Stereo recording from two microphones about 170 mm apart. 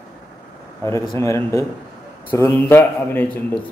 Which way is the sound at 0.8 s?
15° left (ahead or behind).